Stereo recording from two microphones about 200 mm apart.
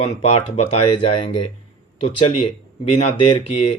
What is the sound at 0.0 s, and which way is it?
Speech, 30° left (ahead or behind).